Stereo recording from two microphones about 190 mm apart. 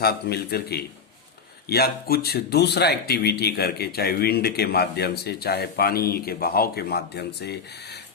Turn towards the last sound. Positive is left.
turn(degrees=60)  # may be behind; listen again after turning